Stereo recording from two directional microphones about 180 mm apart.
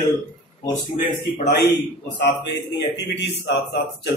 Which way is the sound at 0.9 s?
45° left (ahead or behind).